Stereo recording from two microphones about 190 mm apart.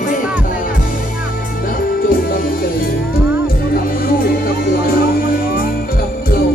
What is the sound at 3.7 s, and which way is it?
Music, 50° left (ahead or behind).